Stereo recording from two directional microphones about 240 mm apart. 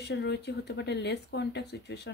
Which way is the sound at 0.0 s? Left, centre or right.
Left.